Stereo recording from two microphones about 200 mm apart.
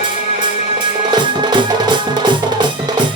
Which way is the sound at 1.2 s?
25° right (ahead or behind).